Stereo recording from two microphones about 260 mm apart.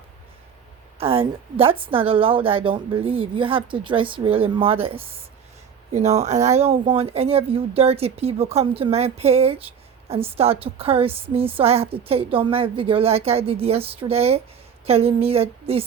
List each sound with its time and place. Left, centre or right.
0.9 s a woman's voice: right